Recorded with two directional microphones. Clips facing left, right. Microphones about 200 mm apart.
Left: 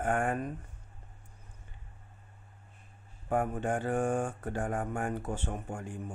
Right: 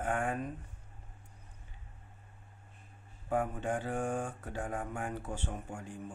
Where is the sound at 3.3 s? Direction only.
50° left (ahead or behind).